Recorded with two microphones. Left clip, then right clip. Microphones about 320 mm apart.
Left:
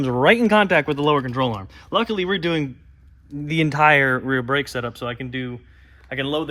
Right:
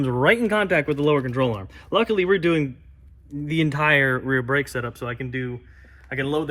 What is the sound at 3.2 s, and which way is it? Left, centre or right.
Speech, left.